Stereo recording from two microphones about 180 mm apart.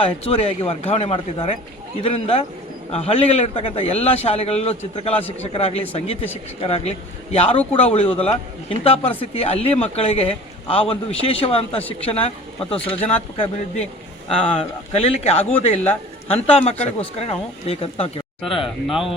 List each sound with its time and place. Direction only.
0.0 s a man's voice: 30° left (ahead or behind)
11.8 s speech: 10° left (ahead or behind)
12.0 s a man's voice: 30° left (ahead or behind)
13.3 s a man's voice: 30° left (ahead or behind)
18.4 s speech: centre (ahead or behind)